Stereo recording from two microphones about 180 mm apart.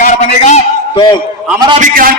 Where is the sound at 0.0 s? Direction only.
40° left (ahead or behind).